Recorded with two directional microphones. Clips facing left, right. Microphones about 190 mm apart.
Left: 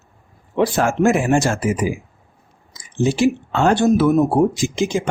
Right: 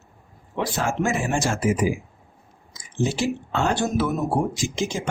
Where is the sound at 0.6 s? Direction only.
65° left (ahead or behind).